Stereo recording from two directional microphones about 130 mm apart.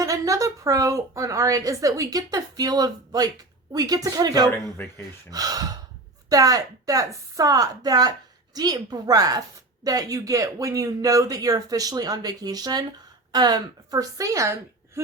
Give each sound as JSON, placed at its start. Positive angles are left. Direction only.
{"t": 0.0, "sound": "a woman's voice", "side_deg": -25}